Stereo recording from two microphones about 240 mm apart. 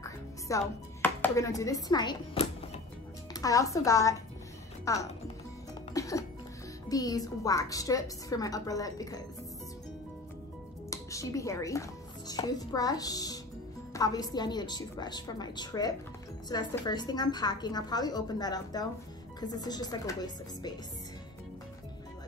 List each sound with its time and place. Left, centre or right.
0.0 s music: centre
3.3 s a woman's voice: centre
5.9 s music: centre
6.9 s a woman's voice: centre
10.9 s a woman's voice: centre